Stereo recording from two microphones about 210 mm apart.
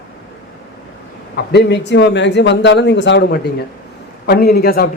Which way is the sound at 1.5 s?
50° left (ahead or behind).